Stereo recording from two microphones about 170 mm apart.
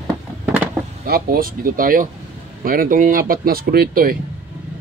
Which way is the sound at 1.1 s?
60° right (ahead or behind).